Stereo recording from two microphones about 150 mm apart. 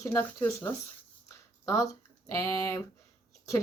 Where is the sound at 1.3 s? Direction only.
20° left (ahead or behind).